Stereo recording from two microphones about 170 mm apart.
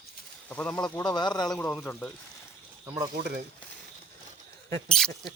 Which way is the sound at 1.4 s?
Centre (ahead or behind).